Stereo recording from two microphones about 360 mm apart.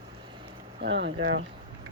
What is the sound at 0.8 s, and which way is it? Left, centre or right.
Speech, right.